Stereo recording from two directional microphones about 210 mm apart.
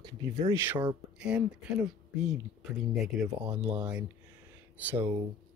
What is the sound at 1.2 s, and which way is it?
Speech, 5° right (ahead or behind).